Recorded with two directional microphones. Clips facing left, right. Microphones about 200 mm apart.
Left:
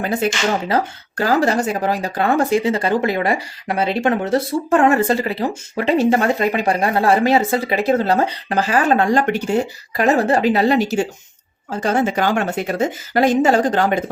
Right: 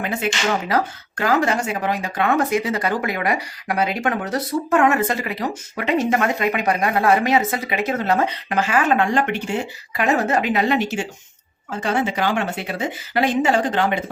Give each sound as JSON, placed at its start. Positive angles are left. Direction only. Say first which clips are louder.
{"t": 0.0, "sound": "speech", "louder": "left 4 dB", "side_deg": 35}